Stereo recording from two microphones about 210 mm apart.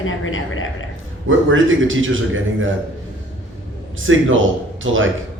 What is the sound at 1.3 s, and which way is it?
Speech, 65° right (ahead or behind).